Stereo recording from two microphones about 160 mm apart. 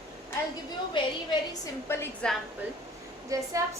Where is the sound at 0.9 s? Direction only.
25° left (ahead or behind).